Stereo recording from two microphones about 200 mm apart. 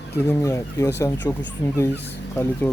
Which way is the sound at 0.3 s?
15° left (ahead or behind).